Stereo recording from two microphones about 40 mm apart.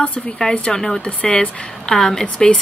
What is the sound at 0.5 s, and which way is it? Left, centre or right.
Speech, left.